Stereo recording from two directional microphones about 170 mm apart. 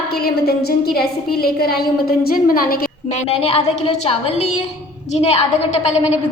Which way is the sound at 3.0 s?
40° left (ahead or behind).